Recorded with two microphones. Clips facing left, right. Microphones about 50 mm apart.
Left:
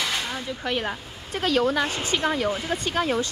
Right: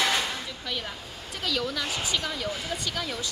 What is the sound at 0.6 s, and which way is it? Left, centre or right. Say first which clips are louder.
A woman's voice: left 7 dB; left.